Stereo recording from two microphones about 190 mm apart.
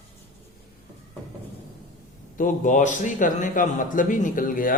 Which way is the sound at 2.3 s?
45° left (ahead or behind).